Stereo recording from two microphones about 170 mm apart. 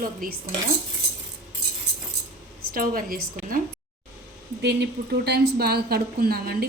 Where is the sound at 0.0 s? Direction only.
55° right (ahead or behind).